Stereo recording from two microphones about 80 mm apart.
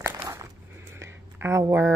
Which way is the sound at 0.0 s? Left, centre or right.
Right.